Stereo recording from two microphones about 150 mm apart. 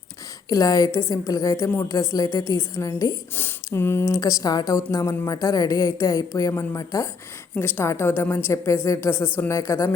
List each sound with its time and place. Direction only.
0.5 s a woman's voice: 25° left (ahead or behind)